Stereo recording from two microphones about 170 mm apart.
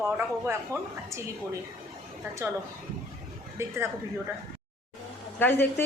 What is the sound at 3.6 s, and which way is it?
Speech, 15° right (ahead or behind).